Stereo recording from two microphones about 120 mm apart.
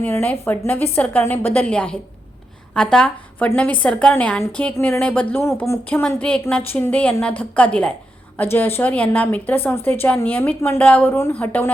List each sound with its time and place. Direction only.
0.0 s a woman's voice: 15° left (ahead or behind)
5.9 s a woman's voice: 10° left (ahead or behind)